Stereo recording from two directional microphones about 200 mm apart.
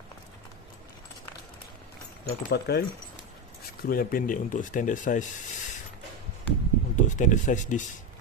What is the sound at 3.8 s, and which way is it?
Speech, 45° left (ahead or behind).